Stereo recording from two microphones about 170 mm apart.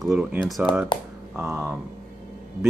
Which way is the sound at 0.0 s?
5° right (ahead or behind).